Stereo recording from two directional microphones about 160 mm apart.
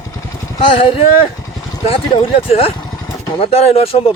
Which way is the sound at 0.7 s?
35° left (ahead or behind).